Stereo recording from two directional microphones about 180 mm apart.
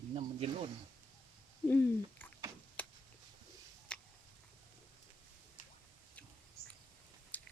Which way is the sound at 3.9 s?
5° left (ahead or behind).